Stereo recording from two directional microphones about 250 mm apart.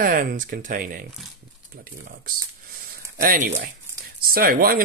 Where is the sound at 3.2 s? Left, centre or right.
Right.